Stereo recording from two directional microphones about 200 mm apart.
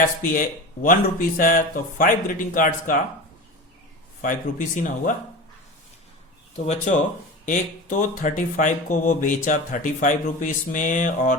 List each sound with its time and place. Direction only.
0.2 s speech: 40° left (ahead or behind)
4.2 s speech: 40° left (ahead or behind)
6.7 s speech: 35° left (ahead or behind)